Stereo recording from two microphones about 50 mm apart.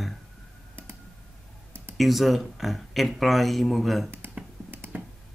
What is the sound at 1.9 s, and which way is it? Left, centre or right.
Speech, centre.